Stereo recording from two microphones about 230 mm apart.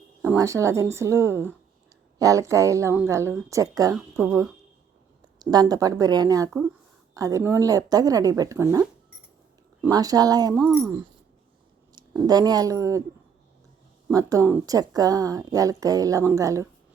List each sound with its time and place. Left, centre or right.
0.2 s speech: centre
10.6 s speech: centre
11.9 s speech: centre
14.1 s speech: centre